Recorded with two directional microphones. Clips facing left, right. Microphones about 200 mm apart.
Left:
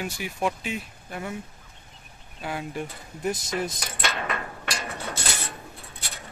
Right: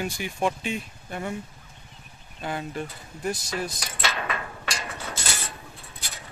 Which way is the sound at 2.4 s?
5° left (ahead or behind).